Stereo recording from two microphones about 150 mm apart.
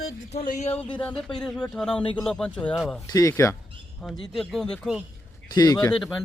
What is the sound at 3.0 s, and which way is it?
Speech, 20° left (ahead or behind).